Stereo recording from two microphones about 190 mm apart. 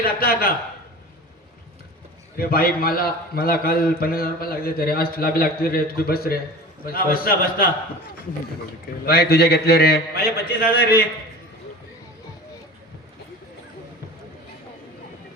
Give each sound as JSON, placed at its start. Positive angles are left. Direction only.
{"t": 0.0, "sound": "a man's voice", "side_deg": 50}
{"t": 2.4, "sound": "a man's voice", "side_deg": 50}
{"t": 9.0, "sound": "a man's voice", "side_deg": 55}